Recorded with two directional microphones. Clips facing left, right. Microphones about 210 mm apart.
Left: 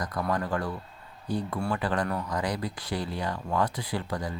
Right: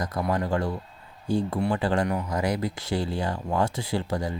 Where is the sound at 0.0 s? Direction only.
25° right (ahead or behind).